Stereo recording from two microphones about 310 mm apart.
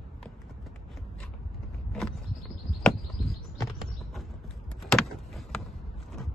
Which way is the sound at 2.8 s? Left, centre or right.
Centre.